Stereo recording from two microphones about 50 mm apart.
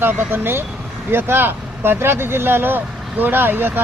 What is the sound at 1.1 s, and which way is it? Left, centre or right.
Speech, right.